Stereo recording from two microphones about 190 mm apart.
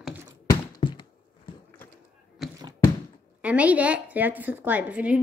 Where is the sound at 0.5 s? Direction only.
25° left (ahead or behind).